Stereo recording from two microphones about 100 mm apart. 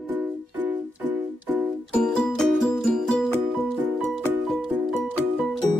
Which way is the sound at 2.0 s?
5° left (ahead or behind).